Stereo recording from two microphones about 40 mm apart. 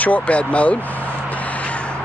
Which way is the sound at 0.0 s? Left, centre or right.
Left.